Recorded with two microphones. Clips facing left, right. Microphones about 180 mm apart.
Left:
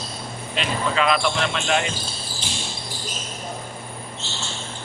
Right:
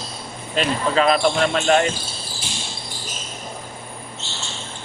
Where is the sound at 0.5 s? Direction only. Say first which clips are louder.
Right 4 dB; 40° right (ahead or behind).